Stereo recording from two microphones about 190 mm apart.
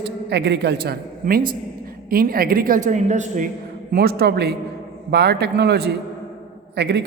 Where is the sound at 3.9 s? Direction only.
55° right (ahead or behind).